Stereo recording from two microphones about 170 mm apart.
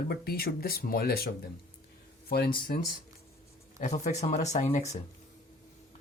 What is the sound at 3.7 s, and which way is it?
Speech, 45° left (ahead or behind).